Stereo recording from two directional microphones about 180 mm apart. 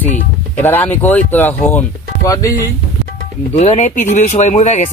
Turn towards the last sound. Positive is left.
turn(degrees=40)  # may be behind; listen again after turning